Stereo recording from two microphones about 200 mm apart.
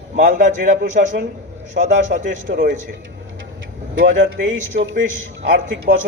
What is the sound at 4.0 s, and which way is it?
Speech, 40° right (ahead or behind).